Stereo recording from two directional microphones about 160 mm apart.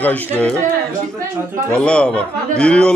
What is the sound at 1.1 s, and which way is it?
Speech, 15° right (ahead or behind).